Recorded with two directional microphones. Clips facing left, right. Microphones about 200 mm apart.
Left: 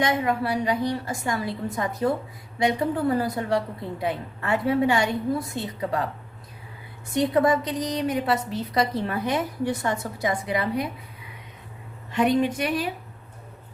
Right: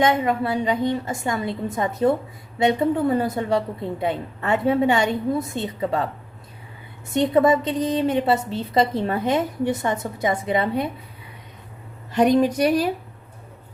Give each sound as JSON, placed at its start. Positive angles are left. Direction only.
{"t": 0.0, "sound": "a woman's voice", "side_deg": -25}
{"t": 7.1, "sound": "a woman's voice", "side_deg": -25}
{"t": 12.1, "sound": "a woman's voice", "side_deg": -40}